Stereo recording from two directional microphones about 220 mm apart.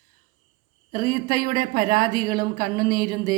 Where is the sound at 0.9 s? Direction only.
40° right (ahead or behind).